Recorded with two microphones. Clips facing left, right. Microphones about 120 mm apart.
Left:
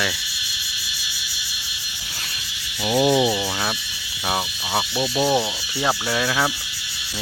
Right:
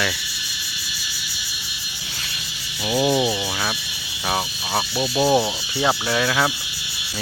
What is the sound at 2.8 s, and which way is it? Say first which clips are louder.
Cricket: left 2 dB; centre (ahead or behind).